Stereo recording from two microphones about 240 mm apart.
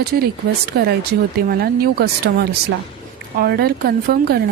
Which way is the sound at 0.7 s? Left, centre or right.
Right.